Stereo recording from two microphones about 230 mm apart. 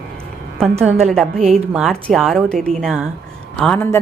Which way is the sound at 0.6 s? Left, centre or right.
Centre.